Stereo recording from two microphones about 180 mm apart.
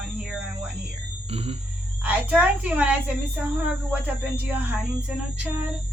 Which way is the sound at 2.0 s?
10° right (ahead or behind).